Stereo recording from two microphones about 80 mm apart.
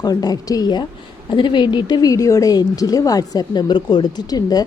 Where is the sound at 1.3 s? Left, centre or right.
Left.